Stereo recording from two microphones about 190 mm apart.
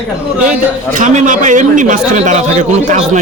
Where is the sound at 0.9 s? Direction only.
40° right (ahead or behind).